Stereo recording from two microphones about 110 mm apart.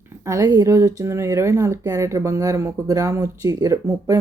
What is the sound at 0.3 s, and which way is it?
Speech, 30° right (ahead or behind).